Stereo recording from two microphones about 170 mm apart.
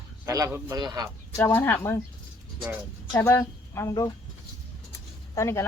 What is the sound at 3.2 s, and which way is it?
Speech, 15° left (ahead or behind).